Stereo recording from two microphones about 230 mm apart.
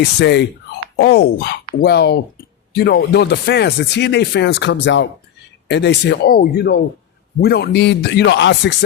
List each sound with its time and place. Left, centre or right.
0.2 s speech: left